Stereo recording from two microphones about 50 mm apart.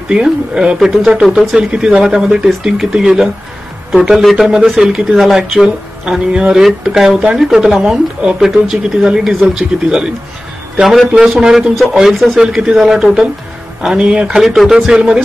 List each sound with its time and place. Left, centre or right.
0.1 s speech: centre
0.7 s a man's voice: centre
6.0 s speech: centre
11.2 s speech: centre
14.3 s speech: centre
15.0 s a man's voice: centre